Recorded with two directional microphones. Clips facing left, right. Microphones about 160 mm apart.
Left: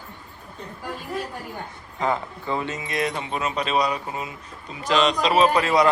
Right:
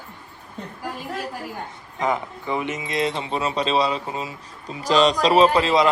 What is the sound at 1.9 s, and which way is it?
Speech, 15° right (ahead or behind).